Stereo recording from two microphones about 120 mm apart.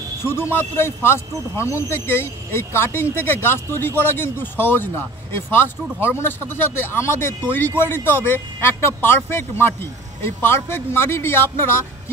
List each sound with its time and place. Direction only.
0.3 s speech: 20° left (ahead or behind)